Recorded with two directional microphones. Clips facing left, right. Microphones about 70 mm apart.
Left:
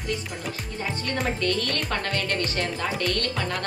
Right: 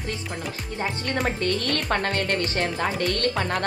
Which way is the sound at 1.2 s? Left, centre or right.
Right.